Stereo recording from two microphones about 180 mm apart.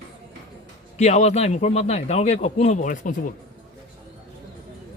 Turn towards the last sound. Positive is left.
turn(degrees=45)  # may be behind; listen again after turning